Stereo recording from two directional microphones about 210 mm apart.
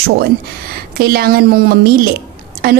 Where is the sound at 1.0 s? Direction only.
45° right (ahead or behind).